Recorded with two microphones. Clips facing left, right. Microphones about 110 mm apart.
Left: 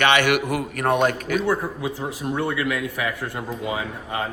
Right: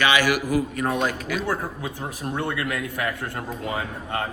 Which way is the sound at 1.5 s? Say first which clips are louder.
Left 4 dB; 20° left (ahead or behind).